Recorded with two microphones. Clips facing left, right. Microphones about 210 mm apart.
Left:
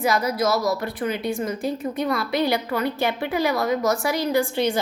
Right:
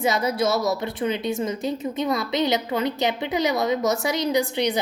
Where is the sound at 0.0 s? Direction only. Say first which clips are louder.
Even; 25° right (ahead or behind).